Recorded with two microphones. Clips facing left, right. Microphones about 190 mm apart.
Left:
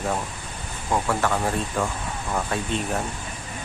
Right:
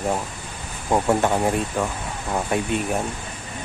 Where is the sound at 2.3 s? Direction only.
15° right (ahead or behind).